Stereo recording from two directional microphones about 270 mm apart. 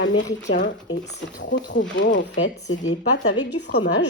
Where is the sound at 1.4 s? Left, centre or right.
Left.